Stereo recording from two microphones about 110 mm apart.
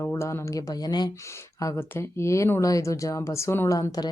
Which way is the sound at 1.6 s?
25° left (ahead or behind).